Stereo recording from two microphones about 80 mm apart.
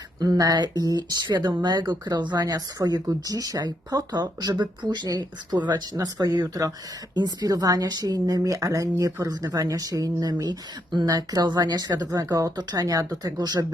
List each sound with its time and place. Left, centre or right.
0.2 s speech: right
5.0 s speech: right